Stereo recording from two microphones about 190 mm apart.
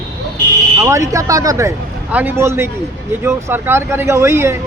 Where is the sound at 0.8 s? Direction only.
15° right (ahead or behind).